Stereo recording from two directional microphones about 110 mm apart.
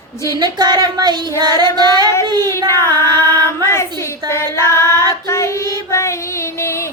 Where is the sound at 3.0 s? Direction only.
25° left (ahead or behind).